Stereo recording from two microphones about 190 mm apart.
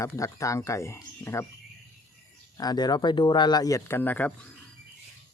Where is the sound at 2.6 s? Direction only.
20° left (ahead or behind).